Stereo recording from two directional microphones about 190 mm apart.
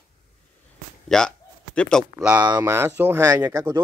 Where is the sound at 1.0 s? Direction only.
5° left (ahead or behind).